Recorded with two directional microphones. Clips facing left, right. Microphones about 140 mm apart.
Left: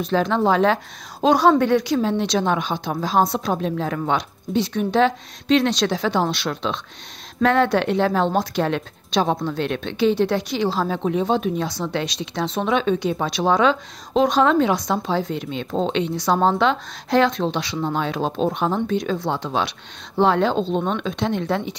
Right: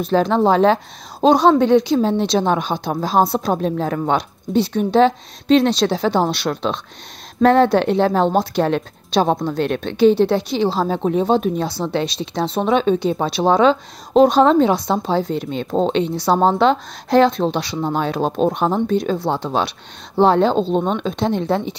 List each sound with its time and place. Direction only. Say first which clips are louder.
0.0 s a woman's voice: right 4 dB; 35° right (ahead or behind)